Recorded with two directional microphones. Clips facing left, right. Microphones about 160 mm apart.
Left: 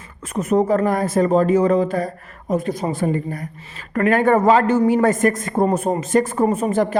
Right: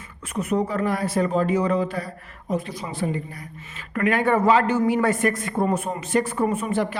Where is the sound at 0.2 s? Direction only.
45° left (ahead or behind).